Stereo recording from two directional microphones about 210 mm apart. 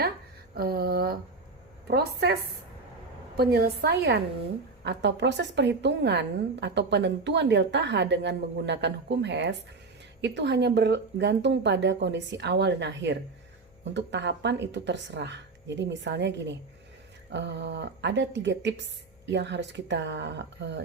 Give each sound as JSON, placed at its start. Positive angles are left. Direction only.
{"t": 0.5, "sound": "a woman's voice", "side_deg": -45}